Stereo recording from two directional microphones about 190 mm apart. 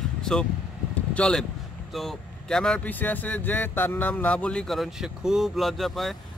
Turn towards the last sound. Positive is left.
turn(degrees=0)  # may be behind; listen again after turning